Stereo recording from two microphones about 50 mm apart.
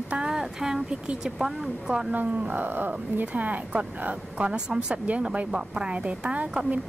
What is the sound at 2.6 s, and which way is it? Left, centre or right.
Speech, right.